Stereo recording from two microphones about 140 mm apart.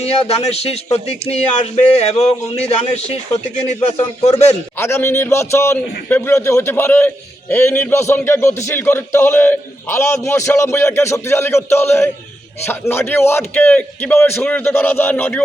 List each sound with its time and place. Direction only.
0.0 s speech: 45° left (ahead or behind)
4.2 s speech: 50° left (ahead or behind)
4.8 s a man's voice: 20° left (ahead or behind)